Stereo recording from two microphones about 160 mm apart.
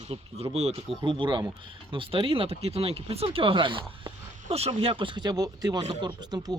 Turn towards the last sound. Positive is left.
turn(degrees=-25)  # may be behind; listen again after turning